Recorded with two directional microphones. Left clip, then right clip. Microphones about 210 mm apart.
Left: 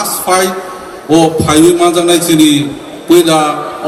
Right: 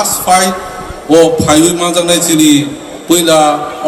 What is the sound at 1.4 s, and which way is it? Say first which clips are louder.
A man's voice: left 2 dB; 15° right (ahead or behind).